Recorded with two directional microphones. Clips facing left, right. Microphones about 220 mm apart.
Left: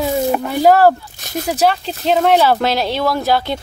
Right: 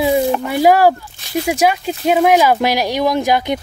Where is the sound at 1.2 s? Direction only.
45° left (ahead or behind).